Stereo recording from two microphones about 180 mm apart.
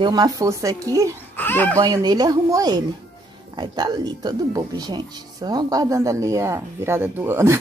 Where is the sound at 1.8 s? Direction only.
20° right (ahead or behind).